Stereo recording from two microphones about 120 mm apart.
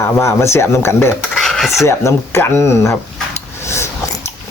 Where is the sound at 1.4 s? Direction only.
Centre (ahead or behind).